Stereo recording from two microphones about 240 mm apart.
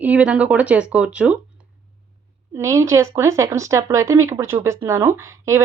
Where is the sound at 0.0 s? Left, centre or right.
Centre.